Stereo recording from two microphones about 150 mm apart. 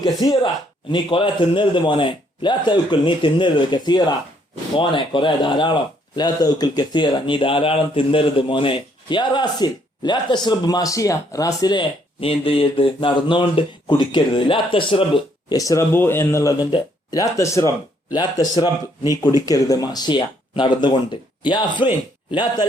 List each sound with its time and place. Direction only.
0.0 s speech: 30° left (ahead or behind)
15.5 s speech: 20° left (ahead or behind)